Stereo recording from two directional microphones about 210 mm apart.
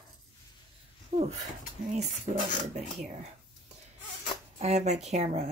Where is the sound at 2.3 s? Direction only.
35° right (ahead or behind).